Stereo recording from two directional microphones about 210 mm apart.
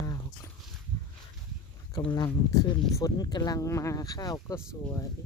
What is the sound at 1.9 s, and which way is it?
Speech, 20° left (ahead or behind).